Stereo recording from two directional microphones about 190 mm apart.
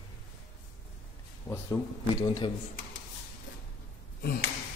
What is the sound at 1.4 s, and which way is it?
Speech, 15° left (ahead or behind).